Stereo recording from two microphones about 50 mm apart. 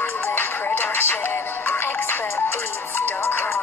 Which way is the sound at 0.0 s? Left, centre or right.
Left.